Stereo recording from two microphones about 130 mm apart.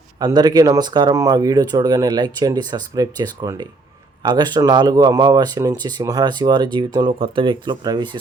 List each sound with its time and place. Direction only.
0.2 s speech: 30° right (ahead or behind)